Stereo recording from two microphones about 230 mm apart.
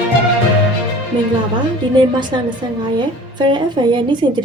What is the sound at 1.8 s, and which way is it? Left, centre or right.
A woman's voice, right.